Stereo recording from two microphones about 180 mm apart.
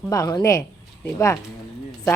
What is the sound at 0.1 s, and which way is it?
A woman's voice, 20° left (ahead or behind).